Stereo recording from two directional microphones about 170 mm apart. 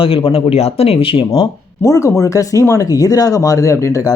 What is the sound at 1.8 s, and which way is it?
Speech, 20° left (ahead or behind).